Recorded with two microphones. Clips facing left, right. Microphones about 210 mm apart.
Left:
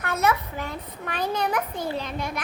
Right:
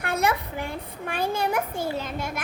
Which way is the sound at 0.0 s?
15° right (ahead or behind).